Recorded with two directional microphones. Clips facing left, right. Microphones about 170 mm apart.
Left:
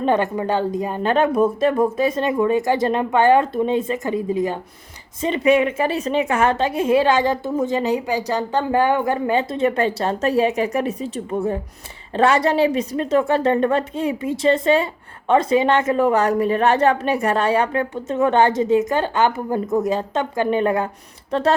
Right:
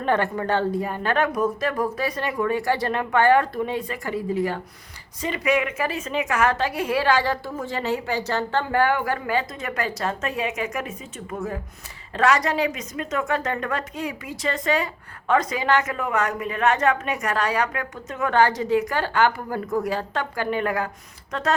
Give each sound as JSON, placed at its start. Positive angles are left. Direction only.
{"t": 0.0, "sound": "a woman's voice", "side_deg": 15}